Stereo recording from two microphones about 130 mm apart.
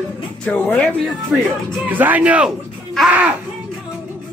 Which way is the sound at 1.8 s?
15° right (ahead or behind).